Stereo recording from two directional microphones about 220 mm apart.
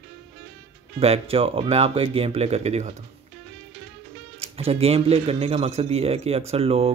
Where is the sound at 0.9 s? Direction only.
25° right (ahead or behind).